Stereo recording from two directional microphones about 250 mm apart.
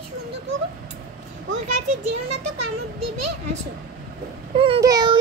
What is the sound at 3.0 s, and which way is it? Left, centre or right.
Speech, right.